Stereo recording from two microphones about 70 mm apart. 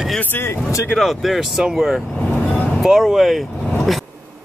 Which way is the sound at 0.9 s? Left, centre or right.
Centre.